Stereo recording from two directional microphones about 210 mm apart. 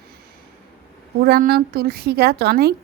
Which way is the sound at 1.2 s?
45° right (ahead or behind).